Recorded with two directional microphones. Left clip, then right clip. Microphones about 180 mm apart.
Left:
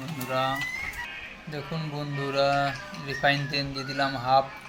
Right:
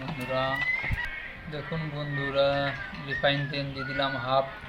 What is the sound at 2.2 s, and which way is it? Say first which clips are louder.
Speech: left 1 dB; 20° left (ahead or behind).